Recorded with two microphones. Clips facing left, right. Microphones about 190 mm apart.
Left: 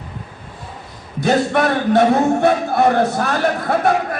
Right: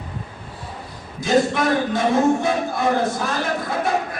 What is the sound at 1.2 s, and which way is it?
A man's voice, 65° left (ahead or behind).